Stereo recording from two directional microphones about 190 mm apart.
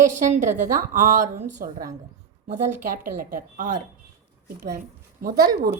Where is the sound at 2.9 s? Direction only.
45° right (ahead or behind).